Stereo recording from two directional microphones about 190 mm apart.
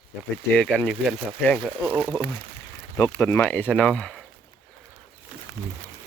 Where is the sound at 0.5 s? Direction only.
5° left (ahead or behind).